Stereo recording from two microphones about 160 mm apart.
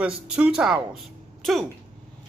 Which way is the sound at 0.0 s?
5° right (ahead or behind).